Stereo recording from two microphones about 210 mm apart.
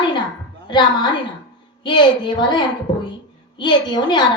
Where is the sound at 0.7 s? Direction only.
20° left (ahead or behind).